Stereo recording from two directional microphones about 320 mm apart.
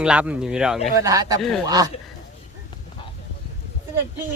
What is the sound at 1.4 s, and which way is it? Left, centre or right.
Speech, centre.